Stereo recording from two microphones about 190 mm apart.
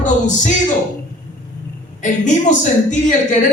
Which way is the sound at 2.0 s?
40° left (ahead or behind).